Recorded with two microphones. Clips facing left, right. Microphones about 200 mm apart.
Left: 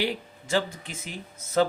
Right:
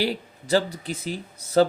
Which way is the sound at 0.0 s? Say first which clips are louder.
Right 3 dB; 35° right (ahead or behind).